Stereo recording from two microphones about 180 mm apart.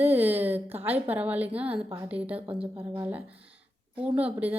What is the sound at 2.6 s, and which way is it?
Speech, 30° right (ahead or behind).